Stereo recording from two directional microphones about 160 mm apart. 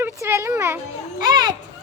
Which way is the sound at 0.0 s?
15° right (ahead or behind).